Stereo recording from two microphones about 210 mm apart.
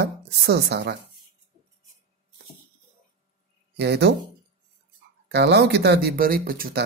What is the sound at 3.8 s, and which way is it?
Speech, 55° right (ahead or behind).